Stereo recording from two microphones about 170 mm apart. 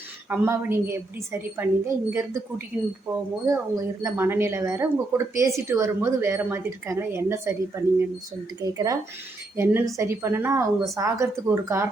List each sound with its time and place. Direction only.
0.3 s speech: 15° right (ahead or behind)